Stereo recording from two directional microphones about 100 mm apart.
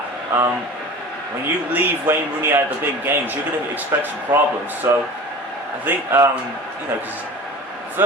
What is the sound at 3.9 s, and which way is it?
Speech, 25° right (ahead or behind).